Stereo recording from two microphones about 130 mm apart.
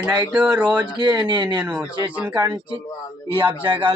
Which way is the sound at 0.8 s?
35° right (ahead or behind).